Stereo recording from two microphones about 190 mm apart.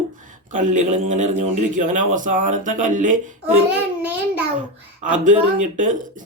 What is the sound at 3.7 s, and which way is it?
Speech, 10° right (ahead or behind).